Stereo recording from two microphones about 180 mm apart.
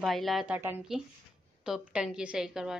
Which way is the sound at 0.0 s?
Centre (ahead or behind).